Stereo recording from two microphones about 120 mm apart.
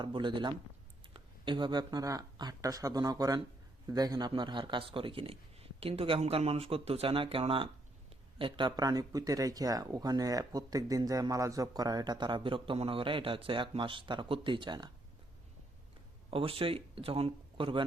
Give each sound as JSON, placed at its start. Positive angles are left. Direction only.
{"t": 0.0, "sound": "speech", "side_deg": -40}
{"t": 16.3, "sound": "speech", "side_deg": -50}